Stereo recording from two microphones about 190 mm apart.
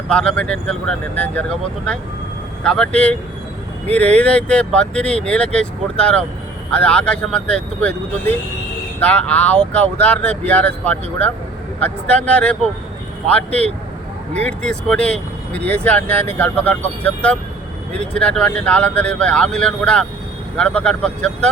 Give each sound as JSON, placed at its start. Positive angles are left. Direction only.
{"t": 0.1, "sound": "speech", "side_deg": 5}
{"t": 9.0, "sound": "speech", "side_deg": 5}